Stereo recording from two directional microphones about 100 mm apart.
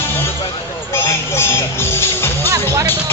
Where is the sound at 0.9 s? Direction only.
25° left (ahead or behind).